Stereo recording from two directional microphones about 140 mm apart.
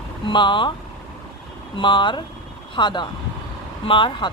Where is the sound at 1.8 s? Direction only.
35° left (ahead or behind).